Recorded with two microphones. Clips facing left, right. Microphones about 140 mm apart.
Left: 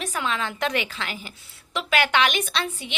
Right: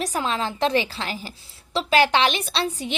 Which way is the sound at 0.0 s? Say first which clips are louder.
Right 3 dB; 35° right (ahead or behind).